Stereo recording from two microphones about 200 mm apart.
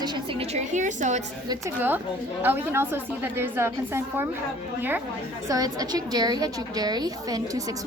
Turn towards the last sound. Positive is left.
turn(degrees=-20)  # may be behind; listen again after turning